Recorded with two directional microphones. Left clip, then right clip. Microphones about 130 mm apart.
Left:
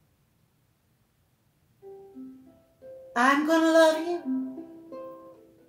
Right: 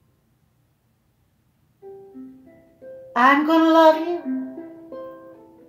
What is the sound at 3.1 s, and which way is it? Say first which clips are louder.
Speech: right 6 dB; 25° left (ahead or behind).